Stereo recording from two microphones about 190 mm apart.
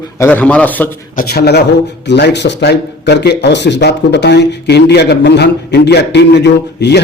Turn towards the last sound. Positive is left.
turn(degrees=65)  # may be behind; listen again after turning